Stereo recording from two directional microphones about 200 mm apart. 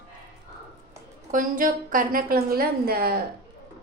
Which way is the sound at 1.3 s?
40° right (ahead or behind).